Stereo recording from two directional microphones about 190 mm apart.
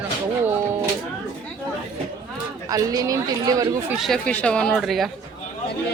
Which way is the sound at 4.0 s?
Centre (ahead or behind).